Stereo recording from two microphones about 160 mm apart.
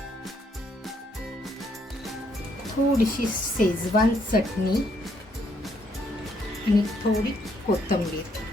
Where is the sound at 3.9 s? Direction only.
65° left (ahead or behind).